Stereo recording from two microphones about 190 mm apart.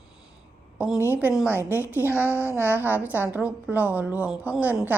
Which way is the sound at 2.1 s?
10° left (ahead or behind).